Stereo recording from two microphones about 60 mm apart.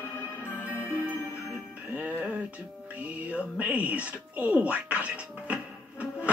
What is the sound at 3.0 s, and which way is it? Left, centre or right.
Music, right.